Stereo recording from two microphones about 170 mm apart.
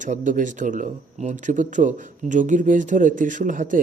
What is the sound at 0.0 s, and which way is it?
Speech, 50° right (ahead or behind).